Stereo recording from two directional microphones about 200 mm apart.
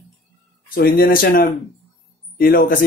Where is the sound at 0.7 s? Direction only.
45° left (ahead or behind).